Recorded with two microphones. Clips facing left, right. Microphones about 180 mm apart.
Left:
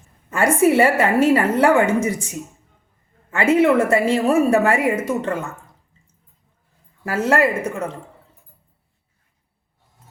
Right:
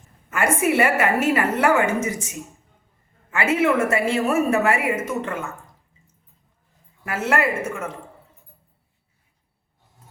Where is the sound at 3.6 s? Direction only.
35° left (ahead or behind).